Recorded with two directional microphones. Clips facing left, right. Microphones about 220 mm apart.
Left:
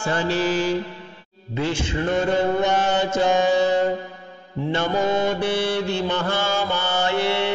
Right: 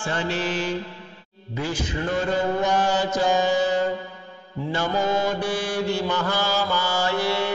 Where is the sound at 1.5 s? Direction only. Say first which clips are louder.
Left 3 dB; 25° left (ahead or behind).